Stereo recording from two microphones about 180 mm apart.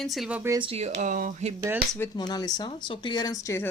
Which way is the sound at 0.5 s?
30° right (ahead or behind).